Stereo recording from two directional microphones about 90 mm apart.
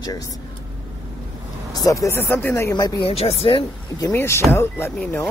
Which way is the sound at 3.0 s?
90° left.